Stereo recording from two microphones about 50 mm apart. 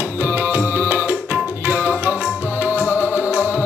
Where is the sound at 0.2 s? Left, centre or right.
Right.